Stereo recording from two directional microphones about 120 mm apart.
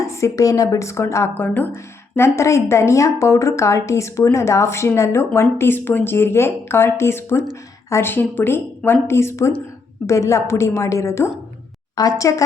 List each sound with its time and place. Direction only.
0.0 s a woman's voice: 30° left (ahead or behind)